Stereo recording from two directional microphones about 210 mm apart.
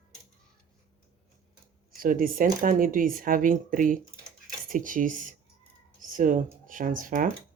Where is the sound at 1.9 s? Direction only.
40° right (ahead or behind).